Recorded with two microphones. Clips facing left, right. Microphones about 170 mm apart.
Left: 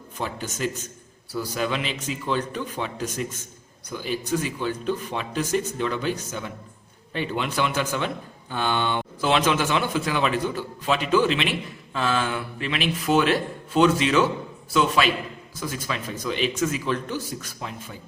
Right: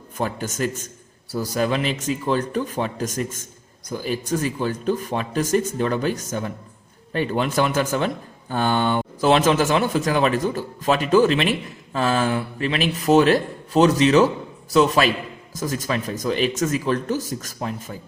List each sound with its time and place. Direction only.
0.2 s a man's voice: 50° right (ahead or behind)